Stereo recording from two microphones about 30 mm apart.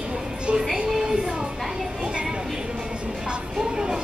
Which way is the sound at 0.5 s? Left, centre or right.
Right.